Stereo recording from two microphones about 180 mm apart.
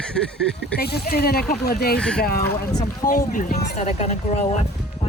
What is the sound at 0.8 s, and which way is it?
Speech, 60° left (ahead or behind).